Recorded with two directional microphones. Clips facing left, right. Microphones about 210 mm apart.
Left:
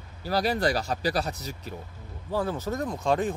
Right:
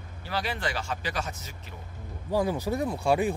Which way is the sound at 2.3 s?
10° right (ahead or behind).